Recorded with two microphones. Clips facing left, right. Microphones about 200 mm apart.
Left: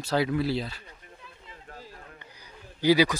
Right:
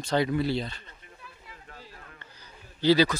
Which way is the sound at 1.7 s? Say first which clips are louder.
Left 4 dB; 40° left (ahead or behind).